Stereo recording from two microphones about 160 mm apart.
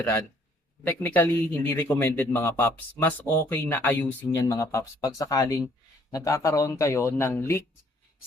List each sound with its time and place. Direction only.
0.9 s speech: 10° left (ahead or behind)